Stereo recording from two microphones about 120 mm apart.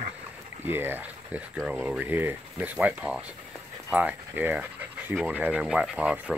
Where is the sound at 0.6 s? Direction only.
15° right (ahead or behind).